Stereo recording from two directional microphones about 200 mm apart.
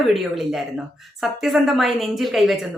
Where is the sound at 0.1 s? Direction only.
Centre (ahead or behind).